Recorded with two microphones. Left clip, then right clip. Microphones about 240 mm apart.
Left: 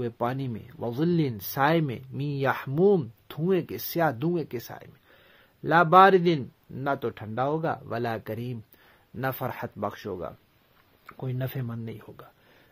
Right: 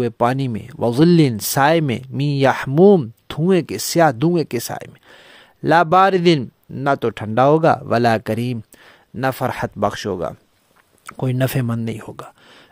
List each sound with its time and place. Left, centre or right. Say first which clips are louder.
0.0 s speech: right 12 dB; right